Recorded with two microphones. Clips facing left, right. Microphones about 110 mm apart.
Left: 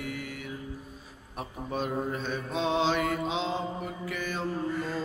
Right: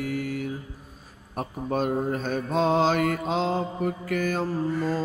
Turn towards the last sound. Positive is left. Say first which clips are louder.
# right 5 dB
turn(degrees=-40)  # may be behind; listen again after turning